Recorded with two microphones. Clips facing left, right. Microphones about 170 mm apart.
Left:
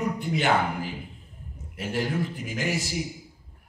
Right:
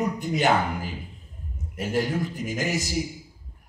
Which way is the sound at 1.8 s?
40° right (ahead or behind).